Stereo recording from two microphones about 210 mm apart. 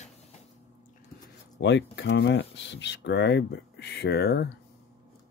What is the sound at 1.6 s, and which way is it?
Speech, 55° left (ahead or behind).